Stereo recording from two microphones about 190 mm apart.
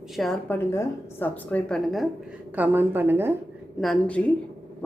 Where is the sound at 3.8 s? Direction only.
5° left (ahead or behind).